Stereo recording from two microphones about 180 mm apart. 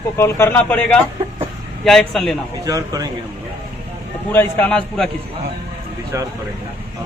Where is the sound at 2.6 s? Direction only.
20° right (ahead or behind).